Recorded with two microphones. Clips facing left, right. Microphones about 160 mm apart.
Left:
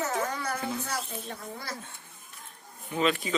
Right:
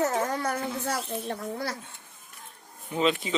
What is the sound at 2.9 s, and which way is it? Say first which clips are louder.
Speech: right 1 dB; 20° right (ahead or behind).